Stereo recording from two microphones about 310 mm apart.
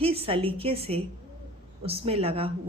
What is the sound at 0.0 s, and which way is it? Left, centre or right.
A woman's voice, centre.